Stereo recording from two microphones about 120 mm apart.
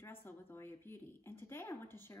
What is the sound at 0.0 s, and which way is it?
A woman's voice, 20° left (ahead or behind).